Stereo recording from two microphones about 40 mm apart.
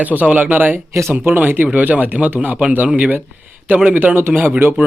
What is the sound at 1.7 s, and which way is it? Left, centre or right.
Speech, right.